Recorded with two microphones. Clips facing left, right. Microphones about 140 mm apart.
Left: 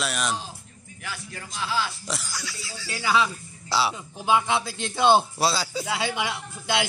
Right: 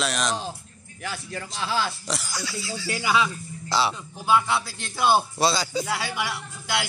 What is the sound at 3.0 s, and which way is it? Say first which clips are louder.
Speech: left 1 dB; 5° right (ahead or behind).